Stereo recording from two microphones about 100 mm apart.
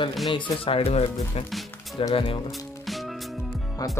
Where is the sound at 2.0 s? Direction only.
65° left (ahead or behind).